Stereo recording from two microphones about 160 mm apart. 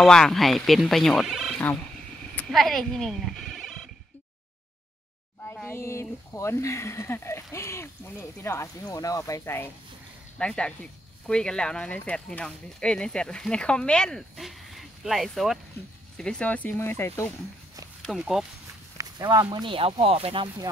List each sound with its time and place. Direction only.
0.0 s speech: 5° left (ahead or behind)
5.7 s speech: 15° left (ahead or behind)
18.0 s speech: centre (ahead or behind)
18.9 s walk: 25° right (ahead or behind)
19.4 s speech: 30° right (ahead or behind)